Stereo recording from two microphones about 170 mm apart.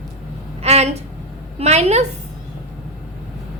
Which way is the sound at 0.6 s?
40° right (ahead or behind).